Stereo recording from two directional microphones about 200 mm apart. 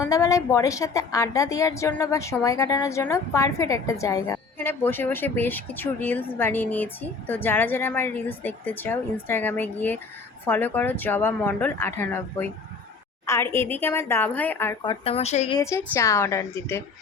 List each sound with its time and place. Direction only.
0.0 s a woman's voice: 15° left (ahead or behind)
14.8 s speech: 30° left (ahead or behind)
15.5 s a woman's voice: 15° left (ahead or behind)